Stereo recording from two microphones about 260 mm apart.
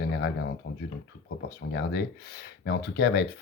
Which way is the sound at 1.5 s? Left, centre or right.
Left.